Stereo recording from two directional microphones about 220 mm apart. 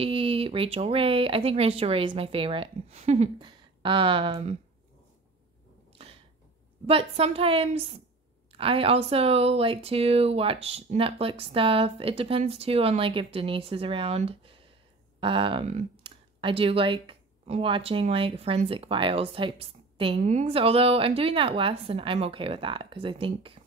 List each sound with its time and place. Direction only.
0.0 s speech: 25° right (ahead or behind)
6.9 s speech: 25° right (ahead or behind)